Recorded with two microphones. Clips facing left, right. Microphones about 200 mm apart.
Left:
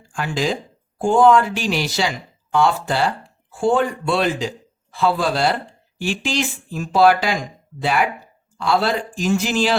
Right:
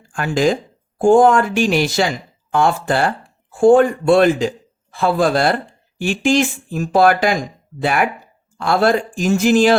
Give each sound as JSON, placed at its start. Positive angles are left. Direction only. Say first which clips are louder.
{"t": 0.1, "sound": "speech", "louder": "right 6 dB", "side_deg": -50}